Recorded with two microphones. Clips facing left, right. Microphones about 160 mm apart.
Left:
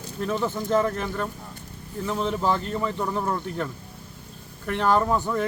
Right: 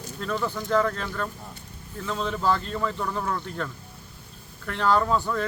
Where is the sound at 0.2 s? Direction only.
20° left (ahead or behind).